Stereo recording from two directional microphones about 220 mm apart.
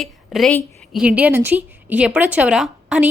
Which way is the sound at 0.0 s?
Centre (ahead or behind).